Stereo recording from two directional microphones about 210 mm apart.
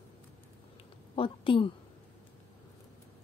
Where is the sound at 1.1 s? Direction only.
25° left (ahead or behind).